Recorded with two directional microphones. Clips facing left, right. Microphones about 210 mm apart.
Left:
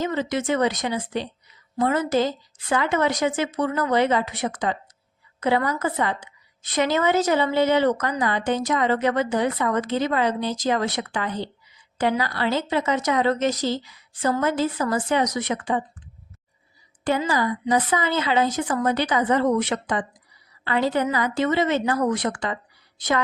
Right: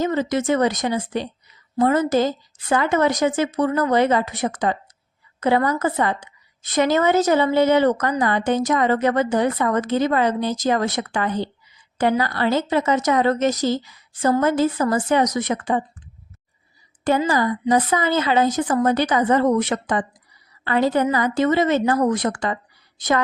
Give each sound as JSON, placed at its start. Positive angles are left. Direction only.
{"t": 0.0, "sound": "a woman's voice", "side_deg": -45}
{"t": 17.0, "sound": "a woman's voice", "side_deg": -45}